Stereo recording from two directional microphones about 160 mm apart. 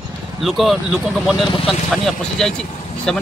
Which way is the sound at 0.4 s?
Centre (ahead or behind).